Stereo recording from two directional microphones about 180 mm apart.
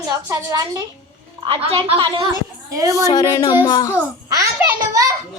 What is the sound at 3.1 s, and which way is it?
Speech, 20° left (ahead or behind).